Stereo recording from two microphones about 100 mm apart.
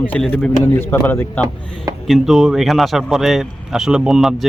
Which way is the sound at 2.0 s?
Centre (ahead or behind).